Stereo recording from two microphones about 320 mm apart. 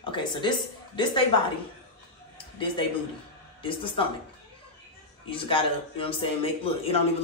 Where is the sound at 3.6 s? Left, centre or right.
Centre.